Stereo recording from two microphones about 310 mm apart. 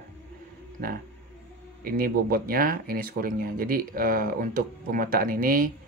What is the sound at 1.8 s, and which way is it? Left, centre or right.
Speech, right.